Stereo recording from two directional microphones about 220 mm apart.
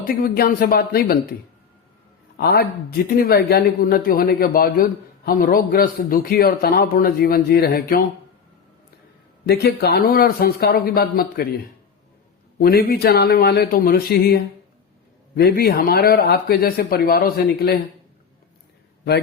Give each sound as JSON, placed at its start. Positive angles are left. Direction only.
{"t": 0.0, "sound": "speech", "side_deg": 40}
{"t": 2.4, "sound": "speech", "side_deg": 45}
{"t": 9.5, "sound": "speech", "side_deg": 45}
{"t": 12.5, "sound": "speech", "side_deg": 40}